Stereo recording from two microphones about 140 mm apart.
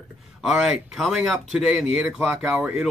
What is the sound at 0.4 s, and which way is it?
Speech, centre (ahead or behind).